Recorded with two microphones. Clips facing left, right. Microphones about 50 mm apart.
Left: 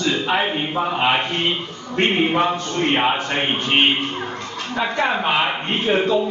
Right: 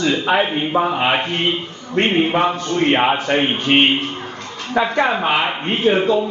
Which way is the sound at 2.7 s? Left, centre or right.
Right.